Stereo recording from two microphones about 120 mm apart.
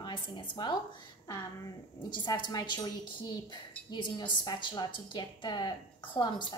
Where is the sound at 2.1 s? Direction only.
40° left (ahead or behind).